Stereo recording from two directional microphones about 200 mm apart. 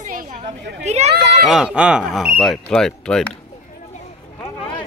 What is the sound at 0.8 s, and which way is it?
Speech, 35° right (ahead or behind).